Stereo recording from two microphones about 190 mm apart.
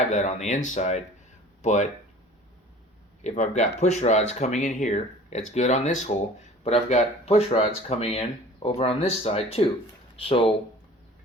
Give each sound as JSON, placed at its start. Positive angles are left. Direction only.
{"t": 0.1, "sound": "speech", "side_deg": 40}
{"t": 3.2, "sound": "speech", "side_deg": 40}